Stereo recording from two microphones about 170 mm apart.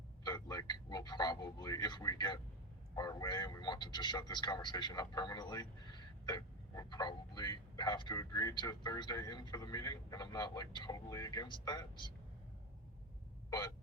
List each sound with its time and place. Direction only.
0.3 s a sound: 20° left (ahead or behind)
2.9 s a man's voice: 20° left (ahead or behind)
13.5 s hiccup: 25° left (ahead or behind)